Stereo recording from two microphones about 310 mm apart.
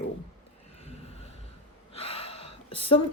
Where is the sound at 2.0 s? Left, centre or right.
Centre.